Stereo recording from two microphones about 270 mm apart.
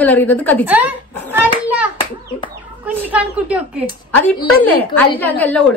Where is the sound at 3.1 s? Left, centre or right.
Centre.